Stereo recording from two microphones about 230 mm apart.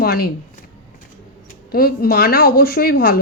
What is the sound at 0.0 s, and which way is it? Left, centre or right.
Speech, left.